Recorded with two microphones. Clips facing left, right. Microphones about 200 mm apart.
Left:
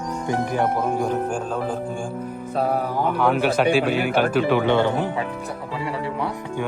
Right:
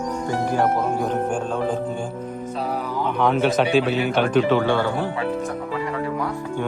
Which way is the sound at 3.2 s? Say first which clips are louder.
Right 1 dB; 10° left (ahead or behind).